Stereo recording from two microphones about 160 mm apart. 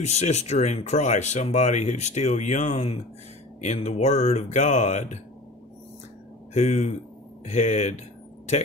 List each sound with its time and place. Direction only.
0.0 s speech: 45° left (ahead or behind)
6.5 s speech: 45° left (ahead or behind)